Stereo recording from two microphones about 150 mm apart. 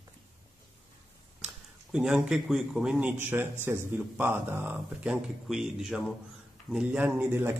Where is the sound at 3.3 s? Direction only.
15° right (ahead or behind).